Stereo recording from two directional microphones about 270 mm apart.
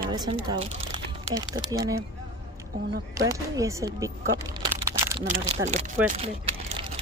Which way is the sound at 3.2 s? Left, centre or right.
Centre.